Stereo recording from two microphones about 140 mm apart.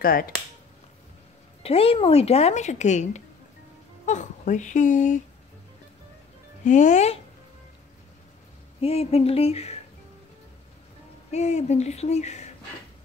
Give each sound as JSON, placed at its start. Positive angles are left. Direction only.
{"t": 0.0, "sound": "speech", "side_deg": 90}
{"t": 1.6, "sound": "speech", "side_deg": 45}
{"t": 6.6, "sound": "speech", "side_deg": 60}
{"t": 8.8, "sound": "speech", "side_deg": 45}
{"t": 11.3, "sound": "speech", "side_deg": 50}